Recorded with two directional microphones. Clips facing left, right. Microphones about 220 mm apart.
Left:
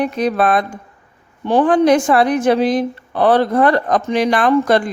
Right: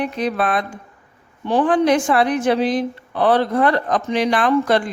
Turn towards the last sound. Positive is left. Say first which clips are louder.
# left 3 dB
turn(degrees=45)  # may be behind; listen again after turning